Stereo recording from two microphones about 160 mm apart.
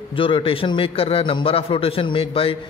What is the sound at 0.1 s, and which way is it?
A man's voice, 35° left (ahead or behind).